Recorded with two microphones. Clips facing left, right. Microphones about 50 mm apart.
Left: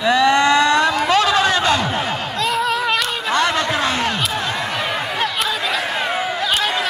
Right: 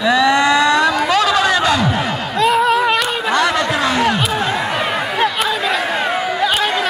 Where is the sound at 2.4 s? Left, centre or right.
Centre.